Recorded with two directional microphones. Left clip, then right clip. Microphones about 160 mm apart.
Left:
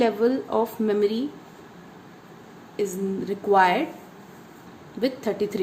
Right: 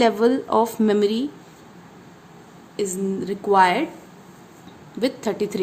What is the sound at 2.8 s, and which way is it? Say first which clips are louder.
A woman's voice: right 2 dB; 20° right (ahead or behind).